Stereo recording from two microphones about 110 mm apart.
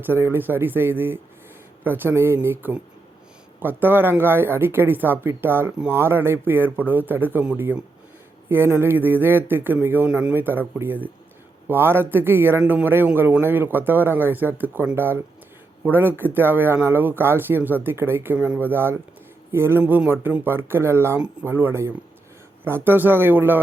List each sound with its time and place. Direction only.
0.0 s speech: 20° right (ahead or behind)
19.8 s speech: 15° right (ahead or behind)